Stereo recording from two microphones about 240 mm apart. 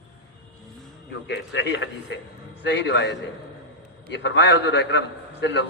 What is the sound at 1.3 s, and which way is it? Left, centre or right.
A man's voice, left.